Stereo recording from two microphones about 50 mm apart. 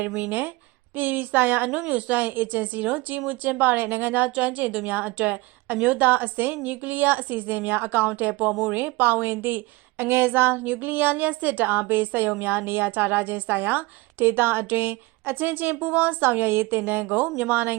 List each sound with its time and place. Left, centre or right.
0.2 s a woman's voice: right
1.8 s a woman's voice: right
8.4 s speech: centre
8.7 s a woman's voice: right